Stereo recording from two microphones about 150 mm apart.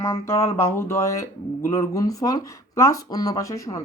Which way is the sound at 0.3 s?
15° left (ahead or behind).